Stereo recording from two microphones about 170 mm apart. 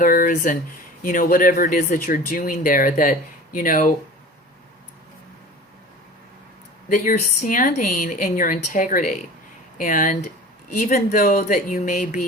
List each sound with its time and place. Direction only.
0.0 s speech: 55° left (ahead or behind)
6.9 s speech: 50° left (ahead or behind)